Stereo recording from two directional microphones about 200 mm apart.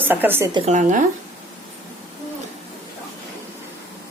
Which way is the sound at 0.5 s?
35° right (ahead or behind).